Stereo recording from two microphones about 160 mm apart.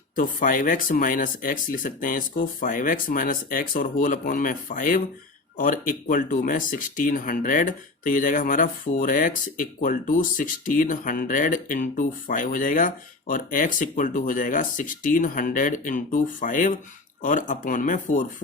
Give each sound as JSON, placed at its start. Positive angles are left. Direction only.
{"t": 0.2, "sound": "speech", "side_deg": 55}